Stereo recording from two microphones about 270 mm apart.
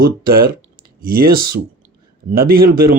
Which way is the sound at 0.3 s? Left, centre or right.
Right.